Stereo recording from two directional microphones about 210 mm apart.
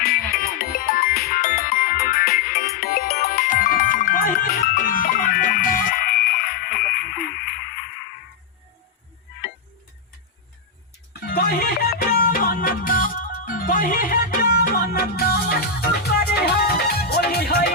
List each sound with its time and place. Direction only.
0.0 s music: 45° left (ahead or behind)
11.3 s music: 45° left (ahead or behind)